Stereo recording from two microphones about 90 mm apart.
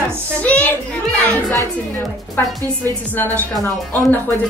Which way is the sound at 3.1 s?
20° left (ahead or behind).